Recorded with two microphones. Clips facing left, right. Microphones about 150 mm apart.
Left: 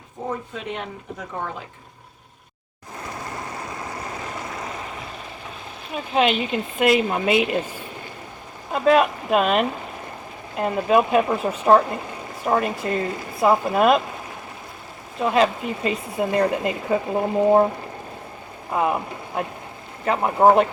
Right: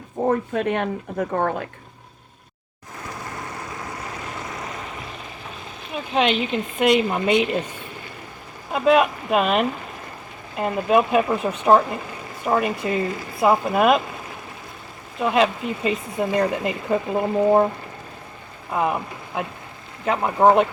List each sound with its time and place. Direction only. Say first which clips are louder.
0.3 s speech: right 8 dB; 60° right (ahead or behind)
6.1 s speech: even; centre (ahead or behind)
8.7 s speech: even; centre (ahead or behind)
15.2 s speech: even; centre (ahead or behind)
18.7 s speech: left 1 dB; centre (ahead or behind)